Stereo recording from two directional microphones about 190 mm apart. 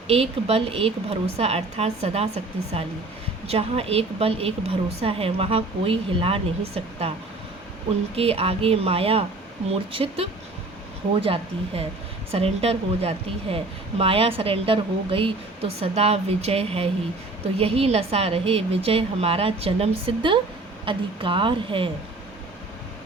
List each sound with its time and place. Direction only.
0.1 s speech: 30° right (ahead or behind)
8.1 s a woman's voice: 30° right (ahead or behind)